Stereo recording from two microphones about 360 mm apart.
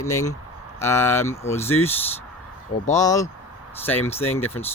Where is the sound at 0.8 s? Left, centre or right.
Centre.